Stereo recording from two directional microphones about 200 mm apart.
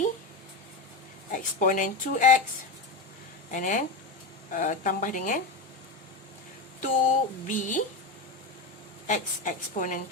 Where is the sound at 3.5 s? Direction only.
40° left (ahead or behind).